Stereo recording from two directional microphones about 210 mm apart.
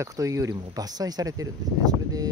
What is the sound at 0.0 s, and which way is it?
Speech, 15° right (ahead or behind).